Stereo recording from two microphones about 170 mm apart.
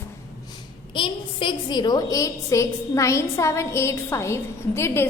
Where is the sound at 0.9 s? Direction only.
30° left (ahead or behind).